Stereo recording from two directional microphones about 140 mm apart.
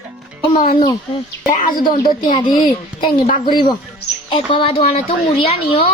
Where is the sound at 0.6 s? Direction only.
80° left.